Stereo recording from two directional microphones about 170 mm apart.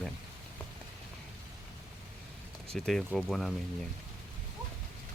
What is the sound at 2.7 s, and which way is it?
Speech, 5° left (ahead or behind).